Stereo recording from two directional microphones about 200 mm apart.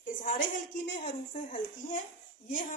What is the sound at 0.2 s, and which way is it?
A woman's voice, 40° left (ahead or behind).